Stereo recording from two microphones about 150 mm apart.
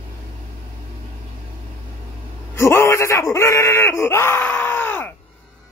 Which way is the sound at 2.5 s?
15° left (ahead or behind).